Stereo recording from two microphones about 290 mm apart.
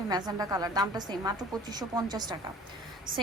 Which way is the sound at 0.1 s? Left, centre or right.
Centre.